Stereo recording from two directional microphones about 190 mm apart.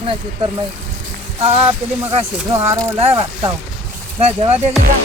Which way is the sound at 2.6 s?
15° right (ahead or behind).